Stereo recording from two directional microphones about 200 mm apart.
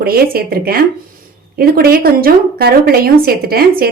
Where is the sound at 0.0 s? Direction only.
50° right (ahead or behind).